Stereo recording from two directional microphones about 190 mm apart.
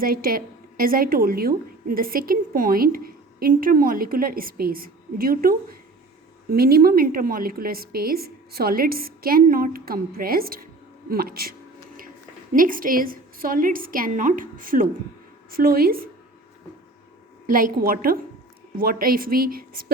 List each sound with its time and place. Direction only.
0.0 s a woman's voice: 50° right (ahead or behind)
12.5 s a woman's voice: 45° right (ahead or behind)
17.5 s a woman's voice: 50° right (ahead or behind)